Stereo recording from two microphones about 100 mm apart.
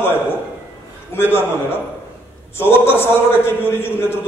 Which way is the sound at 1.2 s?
20° left (ahead or behind).